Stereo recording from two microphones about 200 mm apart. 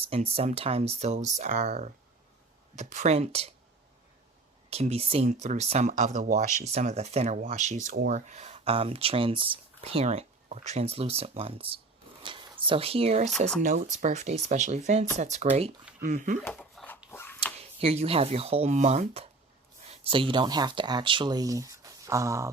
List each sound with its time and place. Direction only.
0.0 s speech: 30° right (ahead or behind)
4.7 s speech: 30° right (ahead or behind)
16.6 s a sound: 5° left (ahead or behind)
17.1 s dog: 10° left (ahead or behind)
17.6 s speech: 30° right (ahead or behind)